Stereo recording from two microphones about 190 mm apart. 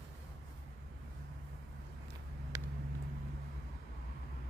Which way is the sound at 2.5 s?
15° right (ahead or behind).